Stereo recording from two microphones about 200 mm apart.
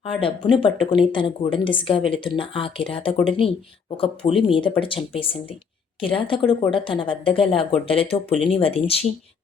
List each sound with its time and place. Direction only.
0.2 s a woman's voice: 25° left (ahead or behind)